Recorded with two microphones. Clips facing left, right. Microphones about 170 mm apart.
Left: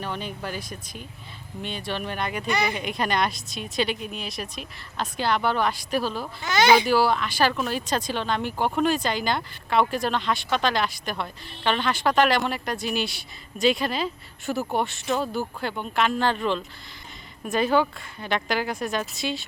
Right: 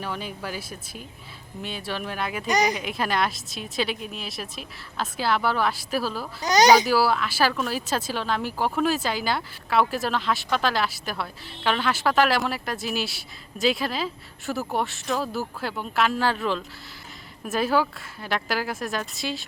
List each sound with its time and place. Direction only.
0.0 s speech: 5° right (ahead or behind)
2.5 s speech: 40° right (ahead or behind)
2.7 s speech: centre (ahead or behind)
6.4 s speech: 40° right (ahead or behind)
6.8 s speech: 5° right (ahead or behind)